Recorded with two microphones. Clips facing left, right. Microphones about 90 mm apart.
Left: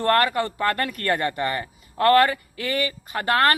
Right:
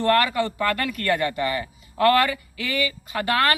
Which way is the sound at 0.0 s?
45° left (ahead or behind).